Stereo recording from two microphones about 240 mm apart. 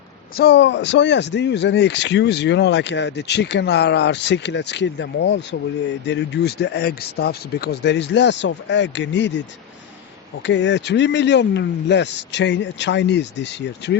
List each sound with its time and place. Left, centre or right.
0.3 s speech: left
10.4 s speech: left